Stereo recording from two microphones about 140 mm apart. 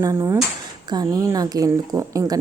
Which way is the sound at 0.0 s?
25° right (ahead or behind).